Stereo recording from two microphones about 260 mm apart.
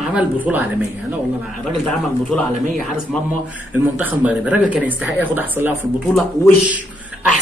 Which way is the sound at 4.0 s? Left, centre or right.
Centre.